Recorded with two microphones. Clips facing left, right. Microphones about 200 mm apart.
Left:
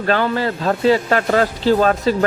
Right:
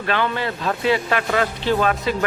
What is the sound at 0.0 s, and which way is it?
Speech, 40° left (ahead or behind).